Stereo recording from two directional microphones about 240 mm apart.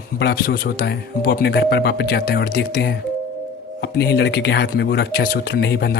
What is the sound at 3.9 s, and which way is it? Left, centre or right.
Speech, left.